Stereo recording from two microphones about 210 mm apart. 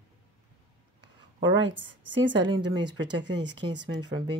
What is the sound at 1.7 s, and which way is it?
Speech, 60° right (ahead or behind).